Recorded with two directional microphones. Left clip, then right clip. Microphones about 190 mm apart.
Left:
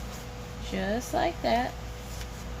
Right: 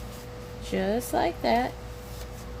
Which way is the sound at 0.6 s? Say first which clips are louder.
Right 3 dB; 45° right (ahead or behind).